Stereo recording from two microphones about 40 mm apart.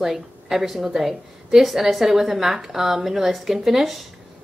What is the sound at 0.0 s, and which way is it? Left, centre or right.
A woman's voice, centre.